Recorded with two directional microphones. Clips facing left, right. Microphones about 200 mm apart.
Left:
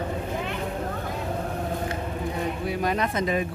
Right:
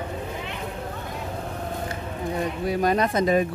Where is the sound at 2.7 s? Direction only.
40° right (ahead or behind).